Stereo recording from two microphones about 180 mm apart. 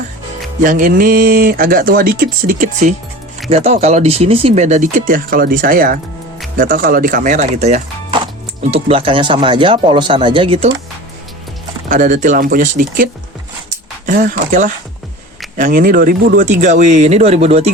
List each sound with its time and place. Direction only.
0.6 s speech: 50° right (ahead or behind)
3.5 s speech: 35° right (ahead or behind)
11.9 s speech: 45° right (ahead or behind)
14.1 s speech: 45° right (ahead or behind)